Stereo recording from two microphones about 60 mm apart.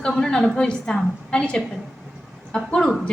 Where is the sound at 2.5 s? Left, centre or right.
Centre.